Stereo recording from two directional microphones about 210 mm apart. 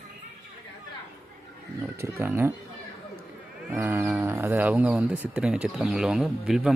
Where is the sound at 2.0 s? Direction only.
10° right (ahead or behind).